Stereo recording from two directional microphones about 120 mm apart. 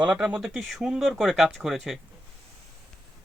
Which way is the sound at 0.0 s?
10° right (ahead or behind).